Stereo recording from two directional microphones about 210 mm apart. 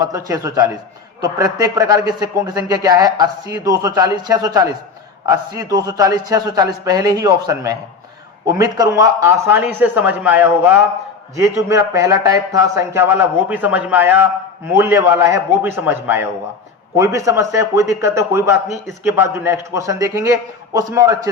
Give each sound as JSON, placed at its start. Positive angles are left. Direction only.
{"t": 0.0, "sound": "a man's voice", "side_deg": -15}